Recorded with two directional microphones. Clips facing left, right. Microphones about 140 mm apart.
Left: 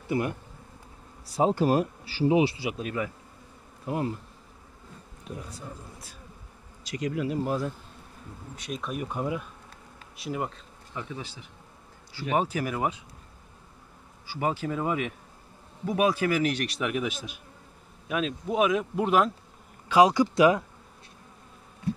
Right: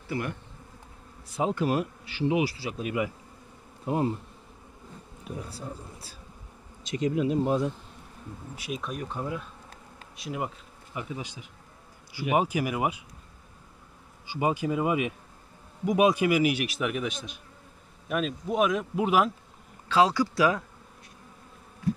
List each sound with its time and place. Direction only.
0.1 s speech: 20° left (ahead or behind)
1.2 s a man's voice: 35° left (ahead or behind)
2.8 s speech: 10° right (ahead or behind)
3.8 s bee: 25° right (ahead or behind)
5.5 s speech: 30° right (ahead or behind)
8.5 s speech: 5° right (ahead or behind); by 9.5 s 10° left (ahead or behind)
10.1 s speech: centre (ahead or behind)
11.0 s speech: 15° right (ahead or behind)
14.2 s speech: 15° right (ahead or behind)
19.9 s speech: 15° left (ahead or behind)